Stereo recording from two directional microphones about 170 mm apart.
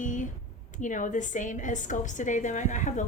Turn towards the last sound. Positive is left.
turn(degrees=45)  # may be behind; listen again after turning